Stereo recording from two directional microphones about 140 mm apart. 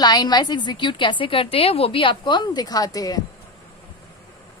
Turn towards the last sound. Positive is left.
turn(degrees=25)  # may be behind; listen again after turning